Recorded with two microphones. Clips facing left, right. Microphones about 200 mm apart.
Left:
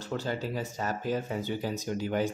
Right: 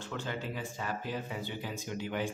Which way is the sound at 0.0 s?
40° left (ahead or behind).